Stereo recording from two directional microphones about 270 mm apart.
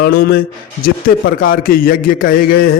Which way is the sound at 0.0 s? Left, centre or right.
Left.